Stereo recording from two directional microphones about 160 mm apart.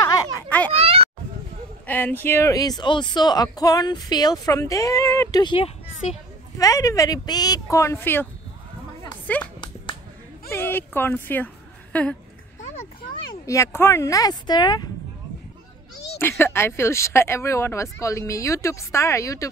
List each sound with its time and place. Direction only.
0.5 s a sound: 10° left (ahead or behind)
0.7 s a child's voice: 35° right (ahead or behind)
1.9 s speech: 10° left (ahead or behind)
9.3 s speech: 10° left (ahead or behind)
10.5 s a woman's voice: 15° left (ahead or behind)
13.5 s speech: 15° left (ahead or behind)
16.2 s speech: 15° left (ahead or behind)